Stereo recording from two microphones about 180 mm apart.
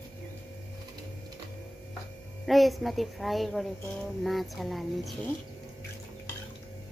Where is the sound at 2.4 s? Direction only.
Centre (ahead or behind).